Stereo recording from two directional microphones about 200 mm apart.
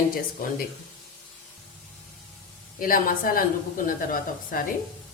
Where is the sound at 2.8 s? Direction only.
45° left (ahead or behind).